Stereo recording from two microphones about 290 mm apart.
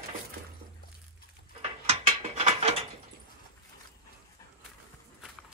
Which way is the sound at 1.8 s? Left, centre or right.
Right.